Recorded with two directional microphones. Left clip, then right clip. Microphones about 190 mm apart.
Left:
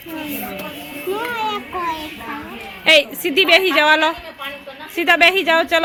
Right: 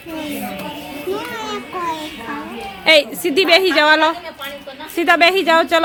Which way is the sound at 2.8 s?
Centre (ahead or behind).